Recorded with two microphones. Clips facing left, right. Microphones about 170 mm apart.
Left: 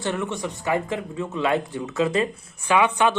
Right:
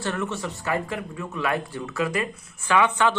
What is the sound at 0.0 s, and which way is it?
Speech, 20° left (ahead or behind).